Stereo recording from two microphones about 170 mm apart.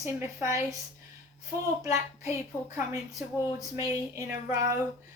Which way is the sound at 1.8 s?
20° right (ahead or behind).